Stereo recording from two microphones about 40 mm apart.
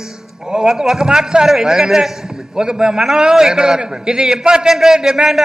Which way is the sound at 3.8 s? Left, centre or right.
Right.